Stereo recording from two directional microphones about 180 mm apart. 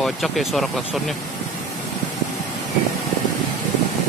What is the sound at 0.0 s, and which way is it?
Speech, centre (ahead or behind).